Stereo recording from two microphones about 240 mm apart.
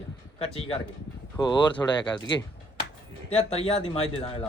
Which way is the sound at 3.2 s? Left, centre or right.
Left.